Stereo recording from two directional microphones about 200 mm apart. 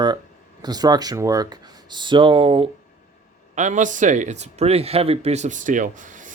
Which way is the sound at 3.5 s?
35° right (ahead or behind).